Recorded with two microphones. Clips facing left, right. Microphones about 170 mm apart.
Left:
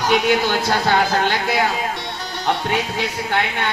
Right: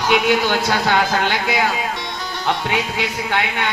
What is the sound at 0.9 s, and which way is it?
Speech, 50° left (ahead or behind).